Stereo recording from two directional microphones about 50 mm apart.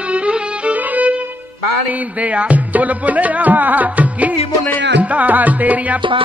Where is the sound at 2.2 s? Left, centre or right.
Right.